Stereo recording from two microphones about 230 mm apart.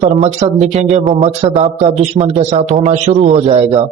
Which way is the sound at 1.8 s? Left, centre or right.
Right.